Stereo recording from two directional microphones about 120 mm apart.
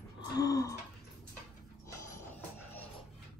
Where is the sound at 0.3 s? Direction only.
30° left (ahead or behind).